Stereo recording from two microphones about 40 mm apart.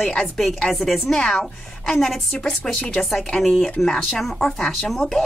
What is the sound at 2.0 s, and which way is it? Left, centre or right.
A woman's voice, centre.